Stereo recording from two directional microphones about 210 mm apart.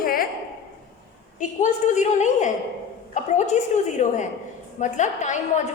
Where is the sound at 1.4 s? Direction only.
35° left (ahead or behind).